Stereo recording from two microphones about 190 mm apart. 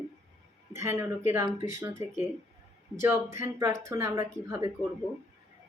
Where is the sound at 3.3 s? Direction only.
15° right (ahead or behind).